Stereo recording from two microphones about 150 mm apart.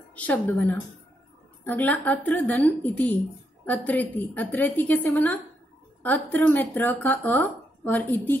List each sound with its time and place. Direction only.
0.1 s speech: 10° left (ahead or behind)